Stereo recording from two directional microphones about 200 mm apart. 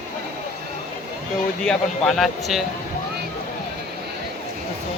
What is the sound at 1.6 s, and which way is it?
Speech, centre (ahead or behind).